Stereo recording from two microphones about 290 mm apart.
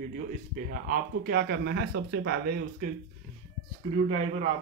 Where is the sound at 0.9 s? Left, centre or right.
Right.